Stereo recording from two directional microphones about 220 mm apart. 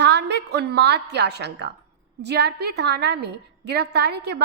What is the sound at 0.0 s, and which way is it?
A woman's voice, 50° right (ahead or behind).